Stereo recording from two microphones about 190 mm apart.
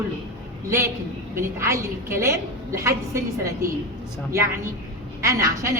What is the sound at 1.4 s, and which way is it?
A woman's voice, 15° right (ahead or behind).